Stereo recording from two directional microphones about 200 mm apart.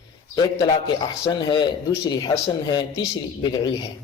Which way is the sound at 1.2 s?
20° left (ahead or behind).